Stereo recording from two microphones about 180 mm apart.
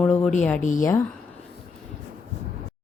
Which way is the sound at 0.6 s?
45° left (ahead or behind).